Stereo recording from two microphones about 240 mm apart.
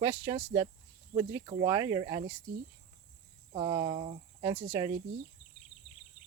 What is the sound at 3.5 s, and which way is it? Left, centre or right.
Speech, right.